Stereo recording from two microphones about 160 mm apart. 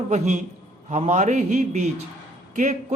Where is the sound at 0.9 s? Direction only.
50° right (ahead or behind).